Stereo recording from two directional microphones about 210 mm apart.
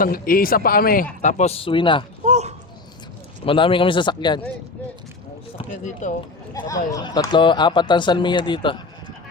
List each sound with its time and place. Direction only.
0.0 s a man's voice: 45° left (ahead or behind); by 2.0 s 25° left (ahead or behind)
2.2 s a sound: 30° right (ahead or behind)
3.4 s speech: 25° left (ahead or behind)
5.5 s speech: 35° left (ahead or behind)
6.5 s speech: 15° left (ahead or behind)